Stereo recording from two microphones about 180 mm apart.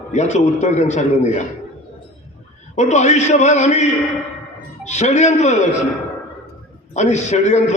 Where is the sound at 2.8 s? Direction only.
40° left (ahead or behind).